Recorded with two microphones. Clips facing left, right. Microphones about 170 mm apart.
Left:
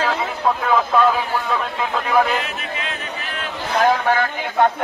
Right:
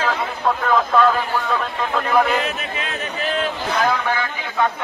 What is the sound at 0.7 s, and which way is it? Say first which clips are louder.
Speech: right 1 dB; 5° left (ahead or behind).